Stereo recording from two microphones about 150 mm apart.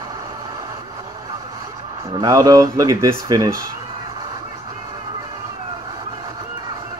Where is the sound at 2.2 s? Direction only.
25° right (ahead or behind).